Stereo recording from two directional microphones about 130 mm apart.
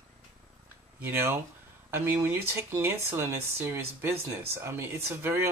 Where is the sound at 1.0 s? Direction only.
15° right (ahead or behind).